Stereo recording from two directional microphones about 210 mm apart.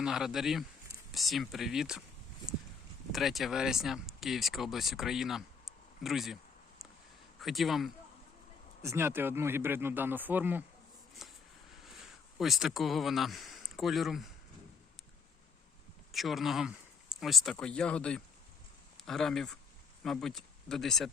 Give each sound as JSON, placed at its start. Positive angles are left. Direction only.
{"t": 0.0, "sound": "speech", "side_deg": 0}
{"t": 3.1, "sound": "speech", "side_deg": 0}
{"t": 8.8, "sound": "speech", "side_deg": -10}
{"t": 11.2, "sound": "a sound", "side_deg": 0}
{"t": 12.0, "sound": "speech", "side_deg": 0}
{"t": 16.1, "sound": "speech", "side_deg": 0}